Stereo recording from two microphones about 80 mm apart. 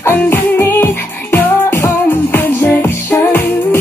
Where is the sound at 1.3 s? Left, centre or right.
Left.